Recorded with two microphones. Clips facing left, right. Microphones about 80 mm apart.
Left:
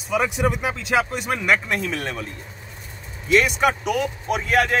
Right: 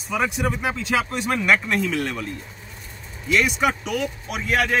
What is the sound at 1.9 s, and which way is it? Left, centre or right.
Speech, left.